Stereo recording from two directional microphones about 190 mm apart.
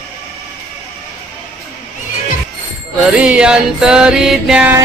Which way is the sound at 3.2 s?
5° right (ahead or behind).